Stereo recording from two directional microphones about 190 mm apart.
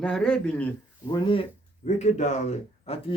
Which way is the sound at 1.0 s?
25° left (ahead or behind).